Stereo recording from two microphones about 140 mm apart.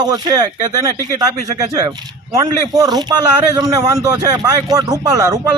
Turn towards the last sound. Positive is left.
turn(degrees=-25)  # may be behind; listen again after turning